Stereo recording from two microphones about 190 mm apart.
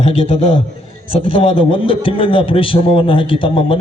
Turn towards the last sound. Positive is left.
turn(degrees=30)  # may be behind; listen again after turning